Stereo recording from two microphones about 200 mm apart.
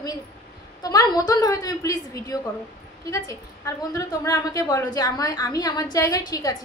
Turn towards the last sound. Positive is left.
turn(degrees=20)  # may be behind; listen again after turning